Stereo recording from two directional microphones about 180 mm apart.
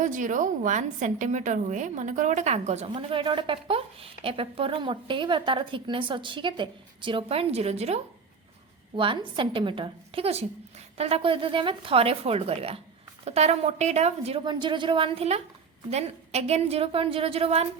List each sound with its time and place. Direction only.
0.0 s a woman's voice: 45° right (ahead or behind)